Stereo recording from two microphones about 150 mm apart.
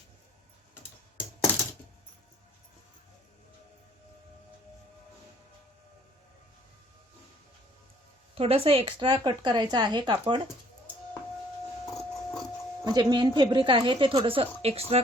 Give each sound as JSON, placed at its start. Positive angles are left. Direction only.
{"t": 8.4, "sound": "a woman's voice", "side_deg": -40}
{"t": 12.8, "sound": "a woman's voice", "side_deg": -30}